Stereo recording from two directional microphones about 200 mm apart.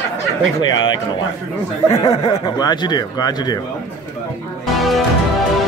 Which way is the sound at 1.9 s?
20° left (ahead or behind).